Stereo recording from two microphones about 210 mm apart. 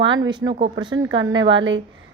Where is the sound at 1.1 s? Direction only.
65° right (ahead or behind).